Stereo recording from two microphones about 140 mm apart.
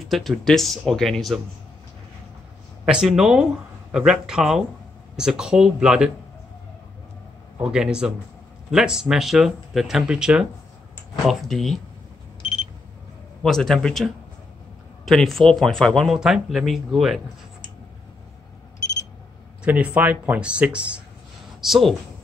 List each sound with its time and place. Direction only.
0.1 s speech: centre (ahead or behind)
2.8 s speech: 5° right (ahead or behind)
7.6 s speech: 5° right (ahead or behind)
12.4 s alarm clock: 40° left (ahead or behind)
13.4 s speech: 5° left (ahead or behind)
19.6 s speech: 10° right (ahead or behind)